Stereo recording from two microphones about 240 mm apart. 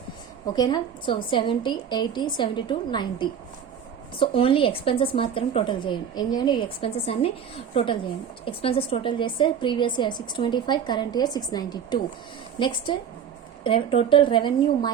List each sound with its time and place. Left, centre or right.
0.5 s a woman's voice: centre